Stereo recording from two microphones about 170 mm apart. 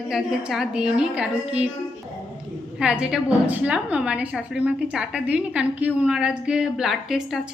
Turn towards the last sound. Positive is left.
turn(degrees=0)  # may be behind; listen again after turning